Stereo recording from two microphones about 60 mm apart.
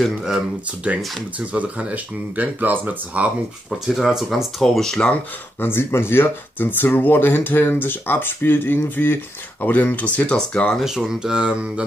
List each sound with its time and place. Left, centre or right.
1.5 s speech: right
3.8 s speech: centre
5.6 s speech: left
10.8 s speech: centre